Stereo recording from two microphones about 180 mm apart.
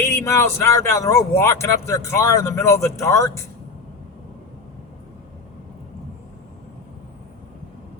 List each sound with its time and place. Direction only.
0.0 s speech: 15° left (ahead or behind)